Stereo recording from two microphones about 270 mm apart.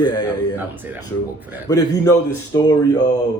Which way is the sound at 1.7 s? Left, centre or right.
Centre.